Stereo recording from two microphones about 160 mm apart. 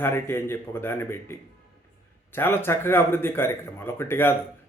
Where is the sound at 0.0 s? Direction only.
15° left (ahead or behind).